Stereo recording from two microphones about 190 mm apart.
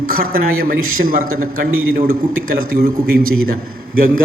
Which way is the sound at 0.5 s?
90° right.